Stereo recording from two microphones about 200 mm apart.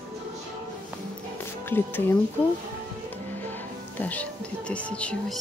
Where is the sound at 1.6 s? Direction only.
10° left (ahead or behind).